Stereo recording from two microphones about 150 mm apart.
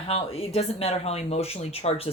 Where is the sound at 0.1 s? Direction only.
40° left (ahead or behind).